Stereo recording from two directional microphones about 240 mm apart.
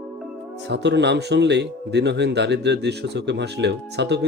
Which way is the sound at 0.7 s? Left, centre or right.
Right.